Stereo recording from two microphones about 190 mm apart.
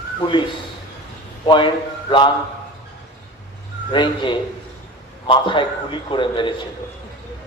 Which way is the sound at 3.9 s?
25° left (ahead or behind).